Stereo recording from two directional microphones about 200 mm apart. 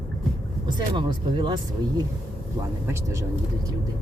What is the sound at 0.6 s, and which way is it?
Speech, 20° right (ahead or behind).